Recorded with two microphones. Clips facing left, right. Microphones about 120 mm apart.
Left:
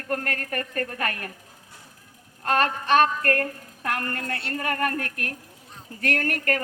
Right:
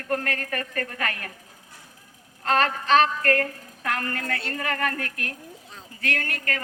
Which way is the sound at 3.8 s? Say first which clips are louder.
Even; 35° left (ahead or behind).